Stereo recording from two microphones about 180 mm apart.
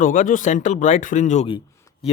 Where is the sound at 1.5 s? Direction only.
30° left (ahead or behind).